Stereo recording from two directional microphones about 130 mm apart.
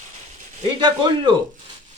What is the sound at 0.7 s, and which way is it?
Speech, 35° right (ahead or behind).